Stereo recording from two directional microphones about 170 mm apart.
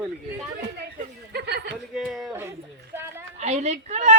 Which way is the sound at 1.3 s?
75° right (ahead or behind).